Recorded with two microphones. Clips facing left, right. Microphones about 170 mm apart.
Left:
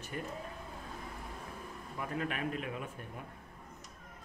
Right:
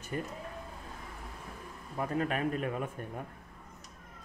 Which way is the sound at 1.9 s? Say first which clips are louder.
Right 6 dB; 40° right (ahead or behind).